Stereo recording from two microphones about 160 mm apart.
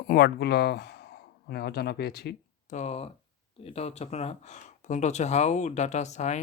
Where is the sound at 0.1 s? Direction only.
85° left.